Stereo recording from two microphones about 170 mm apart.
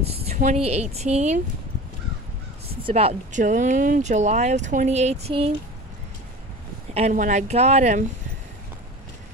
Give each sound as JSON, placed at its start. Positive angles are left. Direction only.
{"t": 0.1, "sound": "a sound", "side_deg": -35}
{"t": 0.4, "sound": "speech", "side_deg": -40}
{"t": 2.8, "sound": "speech", "side_deg": -35}
{"t": 6.9, "sound": "speech", "side_deg": -40}